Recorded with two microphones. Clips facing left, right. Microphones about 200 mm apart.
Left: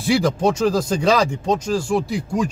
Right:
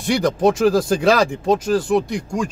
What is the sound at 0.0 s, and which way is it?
Speech, centre (ahead or behind).